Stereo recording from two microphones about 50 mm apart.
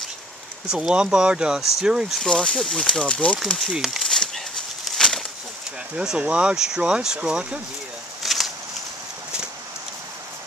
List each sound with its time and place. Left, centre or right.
0.7 s speech: centre
2.2 s speech: centre
2.9 s speech: left
3.7 s speech: centre
4.0 s a sound: centre
4.9 s bird flight: centre
6.1 s speech: right
8.2 s a sound: centre